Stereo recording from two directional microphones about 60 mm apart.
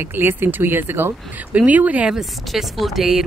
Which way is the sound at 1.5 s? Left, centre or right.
Right.